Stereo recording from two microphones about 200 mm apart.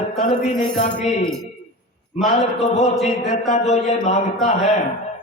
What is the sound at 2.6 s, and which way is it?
Speech, 35° left (ahead or behind).